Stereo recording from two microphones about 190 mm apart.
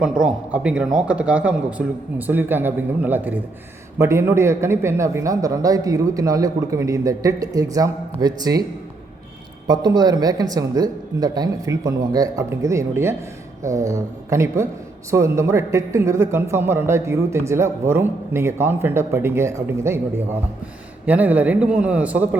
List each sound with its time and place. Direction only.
0.2 s speech: 5° right (ahead or behind)
9.6 s speech: 20° right (ahead or behind)
21.1 s speech: 10° right (ahead or behind)